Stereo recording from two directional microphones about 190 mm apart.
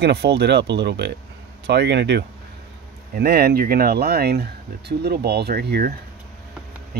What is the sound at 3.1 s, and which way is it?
Speech, 50° right (ahead or behind).